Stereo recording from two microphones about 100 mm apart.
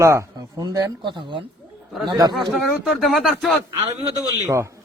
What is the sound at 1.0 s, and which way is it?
Speech, 55° right (ahead or behind).